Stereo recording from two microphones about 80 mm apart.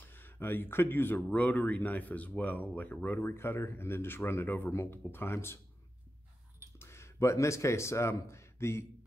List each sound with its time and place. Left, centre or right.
0.1 s speech: left
6.8 s speech: left